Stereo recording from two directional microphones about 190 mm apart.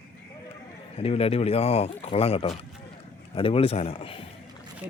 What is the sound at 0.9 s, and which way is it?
A man's voice, 30° left (ahead or behind).